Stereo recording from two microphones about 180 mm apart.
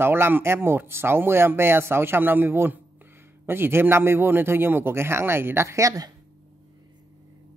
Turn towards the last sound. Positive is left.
turn(degrees=-20)  # may be behind; listen again after turning